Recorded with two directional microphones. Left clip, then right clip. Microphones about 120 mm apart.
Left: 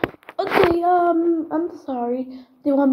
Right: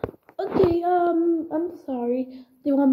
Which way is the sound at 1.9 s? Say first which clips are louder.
Left 2 dB; 30° right (ahead or behind).